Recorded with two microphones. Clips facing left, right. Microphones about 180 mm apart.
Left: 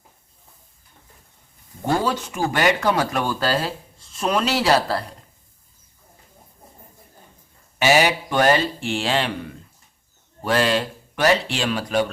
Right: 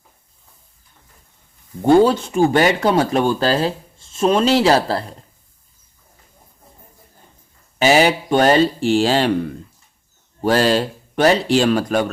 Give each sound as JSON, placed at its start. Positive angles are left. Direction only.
{"t": 1.9, "sound": "speech", "side_deg": -25}
{"t": 7.8, "sound": "speech", "side_deg": -30}
{"t": 10.4, "sound": "speech", "side_deg": -35}